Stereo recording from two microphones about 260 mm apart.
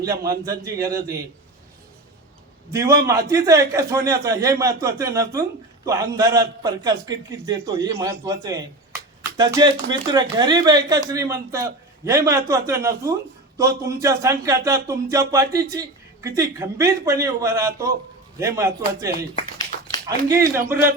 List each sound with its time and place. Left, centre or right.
0.6 s a man's voice: centre
2.6 s a man's voice: centre